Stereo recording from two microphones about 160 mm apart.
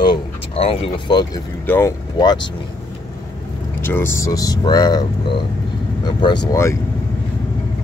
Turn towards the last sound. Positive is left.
turn(degrees=20)  # may be behind; listen again after turning